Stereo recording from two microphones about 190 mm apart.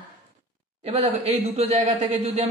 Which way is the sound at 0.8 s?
30° right (ahead or behind).